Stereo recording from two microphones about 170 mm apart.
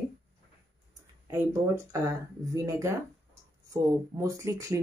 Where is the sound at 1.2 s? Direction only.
15° right (ahead or behind).